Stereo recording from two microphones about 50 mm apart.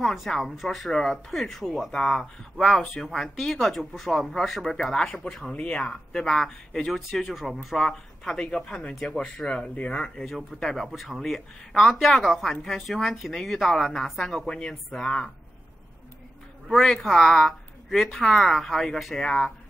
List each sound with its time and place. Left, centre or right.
0.0 s speech: centre
1.9 s speech: centre
3.0 s speech: centre
6.2 s speech: centre
7.8 s speech: centre
14.5 s speech: centre
16.7 s speech: centre